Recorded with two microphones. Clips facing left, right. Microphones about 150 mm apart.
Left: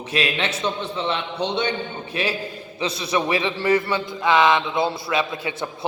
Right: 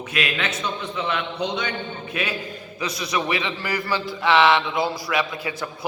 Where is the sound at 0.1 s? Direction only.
30° left (ahead or behind).